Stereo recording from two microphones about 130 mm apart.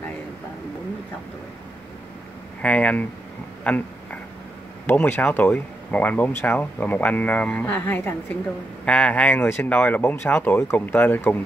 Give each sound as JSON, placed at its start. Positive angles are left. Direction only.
{"t": 2.6, "sound": "speech", "side_deg": 10}
{"t": 3.6, "sound": "a sound", "side_deg": 10}
{"t": 4.8, "sound": "speech", "side_deg": 15}